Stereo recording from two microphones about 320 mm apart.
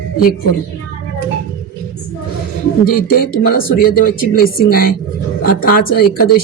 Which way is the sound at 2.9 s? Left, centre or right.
Left.